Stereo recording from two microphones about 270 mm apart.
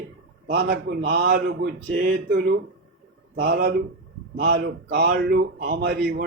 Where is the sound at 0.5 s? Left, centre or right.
Right.